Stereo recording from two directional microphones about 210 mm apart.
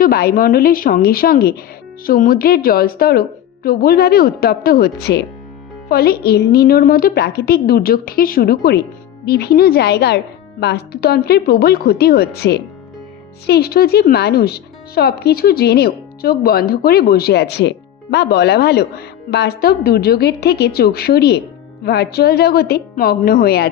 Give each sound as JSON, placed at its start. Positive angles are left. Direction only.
{"t": 0.0, "sound": "speech", "side_deg": 50}